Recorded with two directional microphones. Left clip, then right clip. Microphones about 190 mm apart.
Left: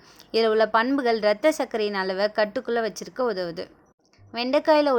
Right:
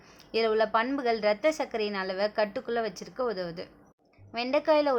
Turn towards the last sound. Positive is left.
turn(degrees=25)  # may be behind; listen again after turning